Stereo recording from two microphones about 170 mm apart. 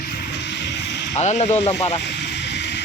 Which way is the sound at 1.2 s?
40° left (ahead or behind).